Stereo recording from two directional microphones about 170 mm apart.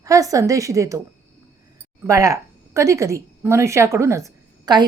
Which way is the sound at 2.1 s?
20° right (ahead or behind).